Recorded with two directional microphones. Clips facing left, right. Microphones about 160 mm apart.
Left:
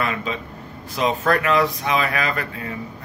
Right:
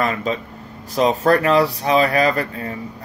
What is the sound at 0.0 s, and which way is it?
Speech, 40° right (ahead or behind).